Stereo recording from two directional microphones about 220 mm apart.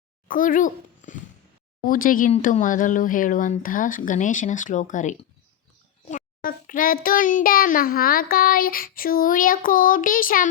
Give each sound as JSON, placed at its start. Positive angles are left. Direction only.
{"t": 0.3, "sound": "a child's voice", "side_deg": 40}
{"t": 1.8, "sound": "child singing", "side_deg": 40}